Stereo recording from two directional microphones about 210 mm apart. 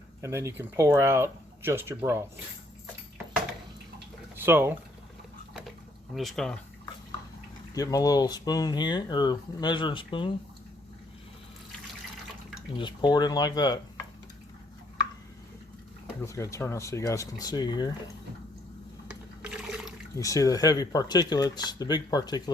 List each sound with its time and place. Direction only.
0.2 s speech: 15° right (ahead or behind)
4.4 s speech: 10° right (ahead or behind)
6.1 s speech: centre (ahead or behind)
7.7 s speech: 15° left (ahead or behind)
12.7 s speech: 20° left (ahead or behind)
16.2 s speech: 15° left (ahead or behind)
19.0 s water: 5° right (ahead or behind)
20.1 s speech: 15° left (ahead or behind)